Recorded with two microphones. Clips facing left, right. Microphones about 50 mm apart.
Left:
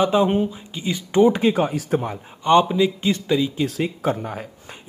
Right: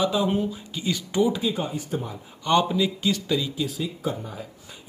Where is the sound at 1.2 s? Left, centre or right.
Left.